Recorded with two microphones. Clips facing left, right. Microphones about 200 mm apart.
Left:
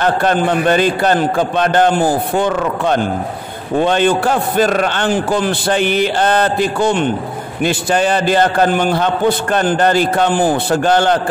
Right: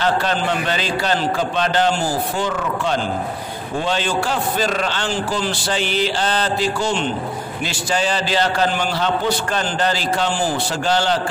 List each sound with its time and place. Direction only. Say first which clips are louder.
0.0 s a man's voice: left 5 dB; 50° left (ahead or behind)